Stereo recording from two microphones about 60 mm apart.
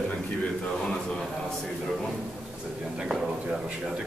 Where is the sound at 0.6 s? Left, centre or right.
Centre.